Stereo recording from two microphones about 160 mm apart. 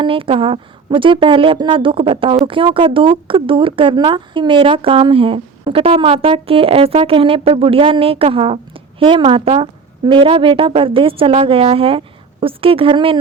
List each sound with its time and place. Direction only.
0.0 s speech: 35° right (ahead or behind)